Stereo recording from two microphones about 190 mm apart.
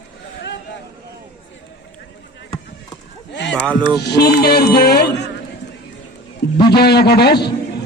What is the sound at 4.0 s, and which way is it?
Music, 60° left (ahead or behind).